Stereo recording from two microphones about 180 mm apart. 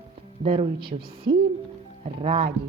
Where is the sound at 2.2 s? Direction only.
35° right (ahead or behind).